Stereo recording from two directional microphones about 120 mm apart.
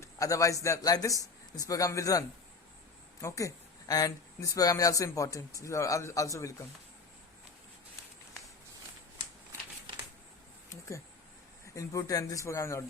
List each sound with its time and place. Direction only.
0.0 s speech: 25° left (ahead or behind)
10.7 s a sound: 25° left (ahead or behind)
11.6 s speech: 25° left (ahead or behind)